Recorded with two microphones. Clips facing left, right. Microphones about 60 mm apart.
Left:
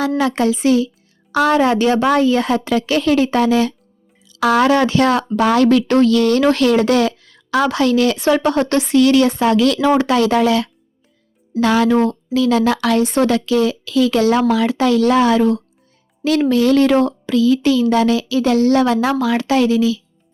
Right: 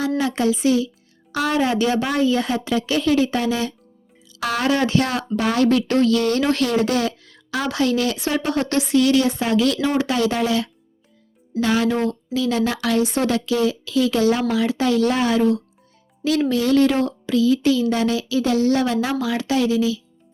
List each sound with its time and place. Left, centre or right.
0.2 s speech: left
1.3 s speech: left
4.7 s speech: left
16.2 s speech: left
17.0 s speech: left
17.3 s speech: left